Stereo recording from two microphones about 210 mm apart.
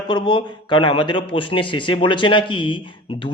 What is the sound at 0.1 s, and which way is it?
A man's voice, 20° left (ahead or behind).